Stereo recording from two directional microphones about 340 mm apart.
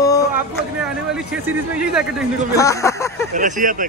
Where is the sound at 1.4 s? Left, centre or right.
Centre.